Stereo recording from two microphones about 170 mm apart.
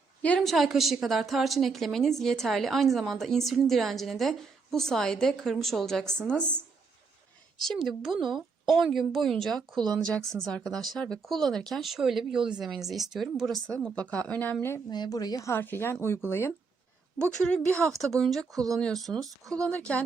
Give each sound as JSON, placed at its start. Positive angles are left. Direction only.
{"t": 0.2, "sound": "a woman's voice", "side_deg": 5}
{"t": 7.9, "sound": "a woman's voice", "side_deg": 0}
{"t": 8.3, "sound": "a sound", "side_deg": 0}
{"t": 8.8, "sound": "a woman's voice", "side_deg": 0}
{"t": 14.8, "sound": "a woman's voice", "side_deg": 25}
{"t": 18.5, "sound": "speech", "side_deg": -20}
{"t": 18.8, "sound": "a woman's voice", "side_deg": 0}
{"t": 19.2, "sound": "speech", "side_deg": -20}
{"t": 19.6, "sound": "speech", "side_deg": 5}